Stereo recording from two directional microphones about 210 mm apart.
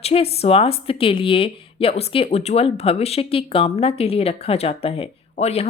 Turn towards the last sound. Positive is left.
turn(degrees=30)  # may be behind; listen again after turning